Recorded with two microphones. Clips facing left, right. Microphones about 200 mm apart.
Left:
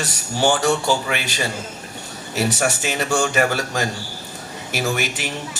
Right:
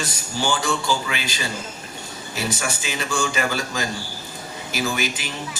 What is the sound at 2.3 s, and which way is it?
Speech, 70° left (ahead or behind).